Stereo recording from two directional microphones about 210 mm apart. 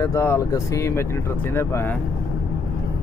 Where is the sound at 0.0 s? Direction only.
15° left (ahead or behind).